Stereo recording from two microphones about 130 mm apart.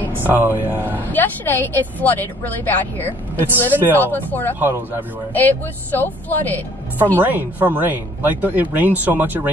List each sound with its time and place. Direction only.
0.2 s speech: 15° right (ahead or behind)
0.8 s speech: 15° left (ahead or behind)
4.6 s speech: 15° right (ahead or behind)
5.3 s speech: 15° left (ahead or behind)
7.2 s speech: 15° right (ahead or behind)